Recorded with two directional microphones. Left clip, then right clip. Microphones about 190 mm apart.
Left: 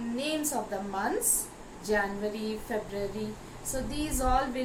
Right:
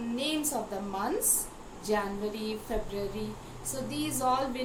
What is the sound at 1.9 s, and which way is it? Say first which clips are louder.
A woman's voice: left 2 dB; 15° right (ahead or behind).